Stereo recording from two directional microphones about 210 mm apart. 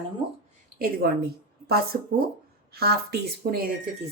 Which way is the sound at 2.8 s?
50° right (ahead or behind).